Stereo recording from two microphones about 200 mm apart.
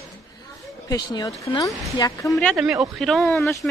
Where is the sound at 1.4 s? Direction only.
15° left (ahead or behind).